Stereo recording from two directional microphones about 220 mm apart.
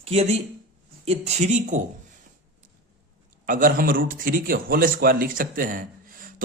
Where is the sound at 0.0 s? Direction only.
30° right (ahead or behind).